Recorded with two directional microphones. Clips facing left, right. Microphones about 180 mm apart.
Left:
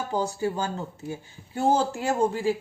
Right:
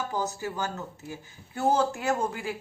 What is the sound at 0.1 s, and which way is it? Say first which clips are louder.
A woman's voice: left 5 dB; 30° left (ahead or behind).